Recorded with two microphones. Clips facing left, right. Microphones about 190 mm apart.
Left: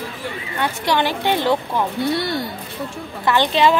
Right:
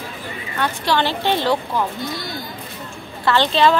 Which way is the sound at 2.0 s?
65° left (ahead or behind).